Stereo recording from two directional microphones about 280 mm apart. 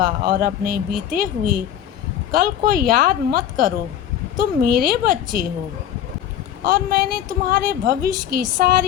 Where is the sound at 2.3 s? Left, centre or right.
Right.